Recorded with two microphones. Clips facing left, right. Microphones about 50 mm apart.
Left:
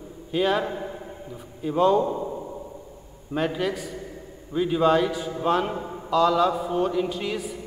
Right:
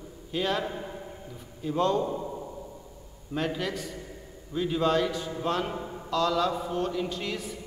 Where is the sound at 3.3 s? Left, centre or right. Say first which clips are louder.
Left 5 dB; centre.